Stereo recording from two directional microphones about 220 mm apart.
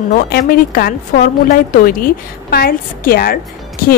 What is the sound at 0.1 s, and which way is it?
A woman's voice, 40° left (ahead or behind).